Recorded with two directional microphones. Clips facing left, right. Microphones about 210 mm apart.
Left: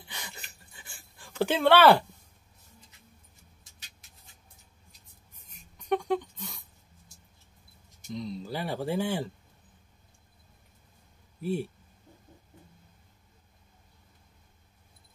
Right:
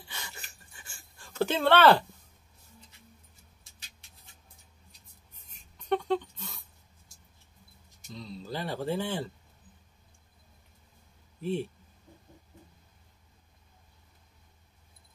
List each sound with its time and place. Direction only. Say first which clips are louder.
0.0 s filing: left 1 dB; 15° left (ahead or behind)
0.8 s writing: left 2 dB; 15° left (ahead or behind)
5.5 s a sound: left 1 dB; 10° left (ahead or behind)
8.1 s speech: left 4 dB; 20° left (ahead or behind)